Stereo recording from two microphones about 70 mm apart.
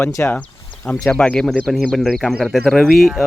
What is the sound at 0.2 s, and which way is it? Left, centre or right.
Speech, left.